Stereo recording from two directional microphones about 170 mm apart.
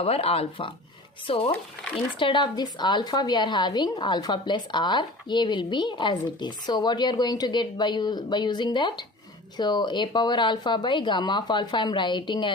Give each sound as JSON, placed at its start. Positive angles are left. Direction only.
{"t": 0.0, "sound": "a woman's voice", "side_deg": 35}